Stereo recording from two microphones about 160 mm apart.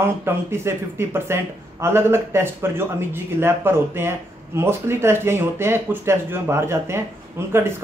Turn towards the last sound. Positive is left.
turn(degrees=-15)  # may be behind; listen again after turning